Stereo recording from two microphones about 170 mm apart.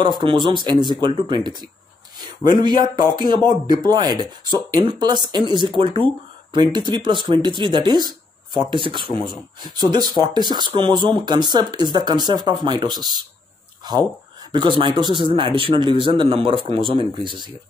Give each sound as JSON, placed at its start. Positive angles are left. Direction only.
{"t": 0.0, "sound": "speech", "side_deg": -30}